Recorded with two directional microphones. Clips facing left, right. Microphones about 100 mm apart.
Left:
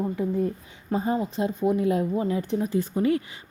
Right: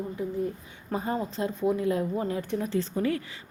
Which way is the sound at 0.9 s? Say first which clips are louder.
Left 4 dB; 15° left (ahead or behind).